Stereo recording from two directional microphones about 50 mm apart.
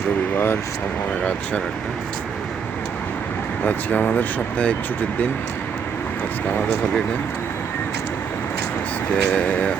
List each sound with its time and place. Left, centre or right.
0.3 s speech: left
3.6 s speech: left
9.1 s speech: left